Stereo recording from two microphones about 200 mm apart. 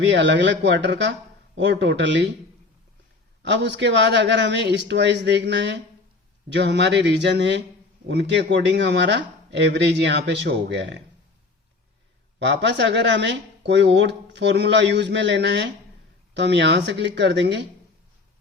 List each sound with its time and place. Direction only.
0.0 s speech: 60° right (ahead or behind)
3.4 s speech: 60° right (ahead or behind)
12.4 s speech: 60° right (ahead or behind)